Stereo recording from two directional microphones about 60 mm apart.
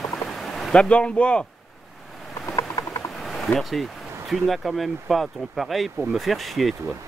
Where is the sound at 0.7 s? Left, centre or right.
Centre.